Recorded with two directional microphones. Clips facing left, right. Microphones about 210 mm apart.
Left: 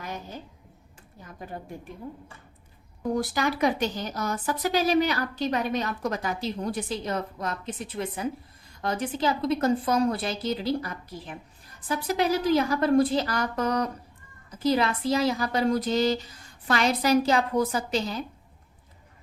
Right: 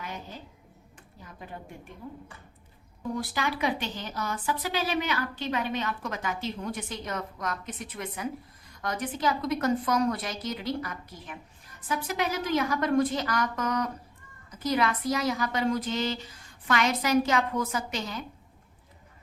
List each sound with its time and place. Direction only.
3.2 s a woman's voice: 45° left (ahead or behind)